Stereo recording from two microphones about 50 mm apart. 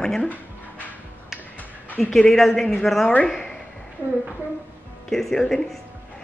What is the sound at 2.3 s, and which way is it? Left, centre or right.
Speech, centre.